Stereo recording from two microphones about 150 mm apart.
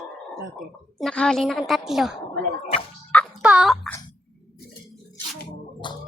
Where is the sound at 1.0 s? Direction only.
5° left (ahead or behind).